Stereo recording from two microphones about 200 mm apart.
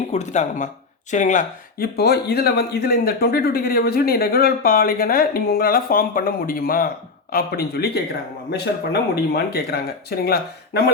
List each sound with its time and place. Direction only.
0.1 s speech: 35° left (ahead or behind); by 10.9 s 50° left (ahead or behind)